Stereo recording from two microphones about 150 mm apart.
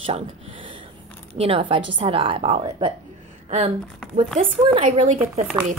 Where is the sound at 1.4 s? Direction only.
35° right (ahead or behind).